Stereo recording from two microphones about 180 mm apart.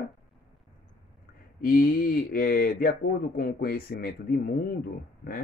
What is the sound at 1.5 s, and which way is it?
Speech, 55° left (ahead or behind).